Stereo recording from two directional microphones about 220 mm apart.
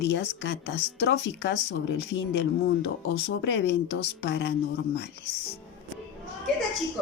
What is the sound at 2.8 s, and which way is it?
Speech, 50° left (ahead or behind).